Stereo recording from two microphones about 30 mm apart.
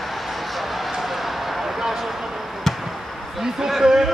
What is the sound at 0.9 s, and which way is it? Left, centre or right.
Basketball bounce, centre.